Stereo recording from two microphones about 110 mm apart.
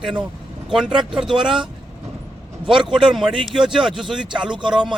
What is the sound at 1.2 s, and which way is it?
Speech, 45° right (ahead or behind).